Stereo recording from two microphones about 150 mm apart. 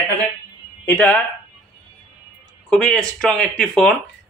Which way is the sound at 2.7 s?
5° left (ahead or behind).